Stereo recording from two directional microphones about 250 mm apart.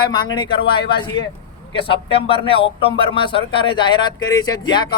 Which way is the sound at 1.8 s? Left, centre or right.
Left.